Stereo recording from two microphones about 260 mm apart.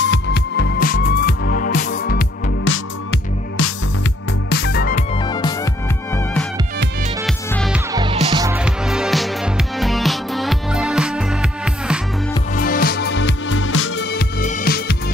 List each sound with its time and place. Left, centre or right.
0.0 s music: left
2.7 s music: left
4.5 s music: left
5.1 s music: centre
7.2 s music: centre
7.9 s music: centre
12.5 s music: left
14.4 s music: left